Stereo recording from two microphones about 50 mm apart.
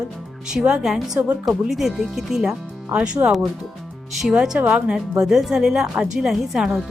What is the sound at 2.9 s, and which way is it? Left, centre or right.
Speech, right.